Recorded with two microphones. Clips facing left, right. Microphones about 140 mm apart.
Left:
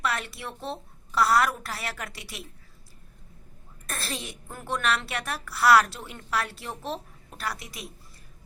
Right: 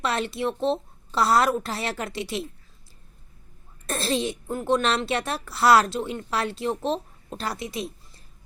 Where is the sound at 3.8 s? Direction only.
25° right (ahead or behind).